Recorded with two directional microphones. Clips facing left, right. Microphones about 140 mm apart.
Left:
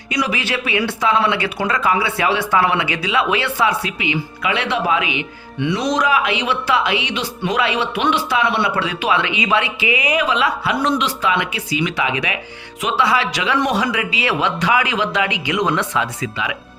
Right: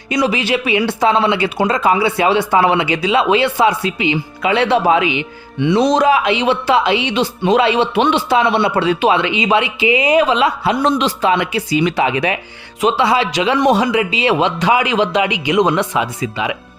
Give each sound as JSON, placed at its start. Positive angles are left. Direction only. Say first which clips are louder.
{"t": 0.1, "sound": "speech", "louder": "right 5 dB", "side_deg": -25}
{"t": 12.8, "sound": "speech", "louder": "right 4 dB", "side_deg": -25}